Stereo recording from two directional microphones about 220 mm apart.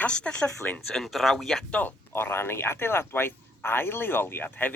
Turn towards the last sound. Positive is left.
turn(degrees=10)  # may be behind; listen again after turning